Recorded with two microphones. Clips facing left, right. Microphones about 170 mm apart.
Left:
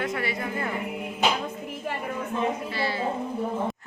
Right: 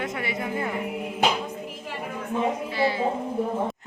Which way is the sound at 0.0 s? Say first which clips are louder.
Even; 20° right (ahead or behind).